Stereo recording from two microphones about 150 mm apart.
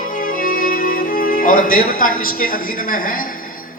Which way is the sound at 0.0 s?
65° left (ahead or behind).